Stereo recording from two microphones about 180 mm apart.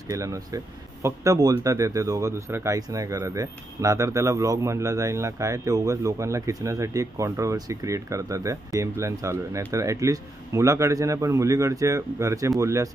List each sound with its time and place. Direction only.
0.1 s speech: 15° right (ahead or behind)